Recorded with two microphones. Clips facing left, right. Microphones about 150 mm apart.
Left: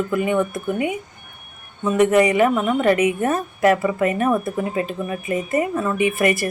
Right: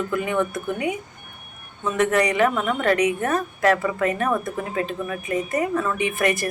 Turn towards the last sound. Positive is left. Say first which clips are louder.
# left 4 dB
turn(degrees=5)  # may be behind; listen again after turning